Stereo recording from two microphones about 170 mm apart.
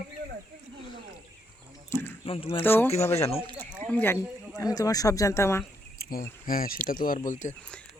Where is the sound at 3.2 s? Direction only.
35° left (ahead or behind).